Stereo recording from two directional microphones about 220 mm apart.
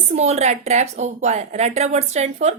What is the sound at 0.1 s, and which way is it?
A woman's voice, 30° right (ahead or behind).